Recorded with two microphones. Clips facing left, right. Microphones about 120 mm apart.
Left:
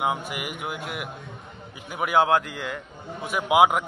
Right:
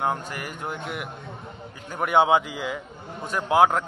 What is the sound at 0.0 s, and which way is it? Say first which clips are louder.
A man's voice: even; 10° left (ahead or behind).